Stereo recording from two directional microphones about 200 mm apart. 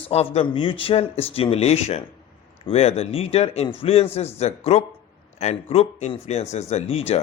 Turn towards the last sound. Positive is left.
turn(degrees=30)  # may be behind; listen again after turning